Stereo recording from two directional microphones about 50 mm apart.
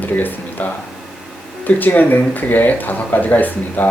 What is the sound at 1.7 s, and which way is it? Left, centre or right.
Speech, left.